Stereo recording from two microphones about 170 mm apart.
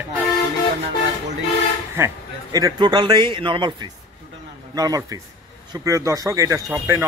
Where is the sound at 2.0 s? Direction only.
15° right (ahead or behind).